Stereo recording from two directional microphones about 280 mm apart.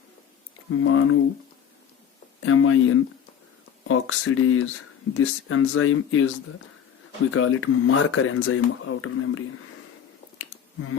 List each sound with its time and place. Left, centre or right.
0.7 s speech: left
2.4 s speech: left
7.3 s speech: left